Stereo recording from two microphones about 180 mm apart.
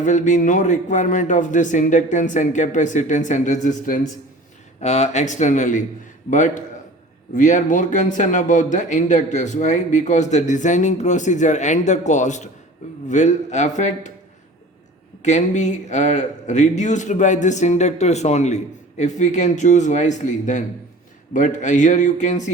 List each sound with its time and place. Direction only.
0.0 s a man's voice: 45° left (ahead or behind)
15.2 s a man's voice: 40° left (ahead or behind)